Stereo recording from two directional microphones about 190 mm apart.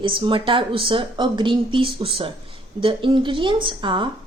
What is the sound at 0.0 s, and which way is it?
Speech, 25° right (ahead or behind).